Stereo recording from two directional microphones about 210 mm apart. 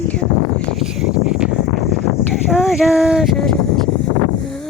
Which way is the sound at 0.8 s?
5° right (ahead or behind).